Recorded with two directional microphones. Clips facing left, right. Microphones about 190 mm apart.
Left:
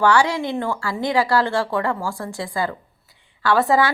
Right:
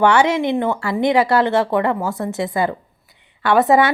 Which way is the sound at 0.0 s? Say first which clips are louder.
Right 3 dB; 20° right (ahead or behind).